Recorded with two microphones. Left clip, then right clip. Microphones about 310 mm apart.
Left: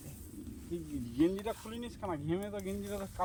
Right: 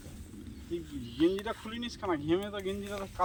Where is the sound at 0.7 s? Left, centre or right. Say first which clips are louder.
Right 2 dB; left.